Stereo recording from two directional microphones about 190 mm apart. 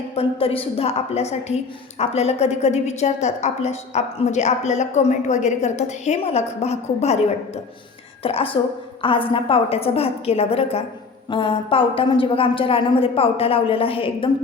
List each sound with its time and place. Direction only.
0.2 s a woman's voice: 30° left (ahead or behind)
8.2 s a woman's voice: 30° left (ahead or behind)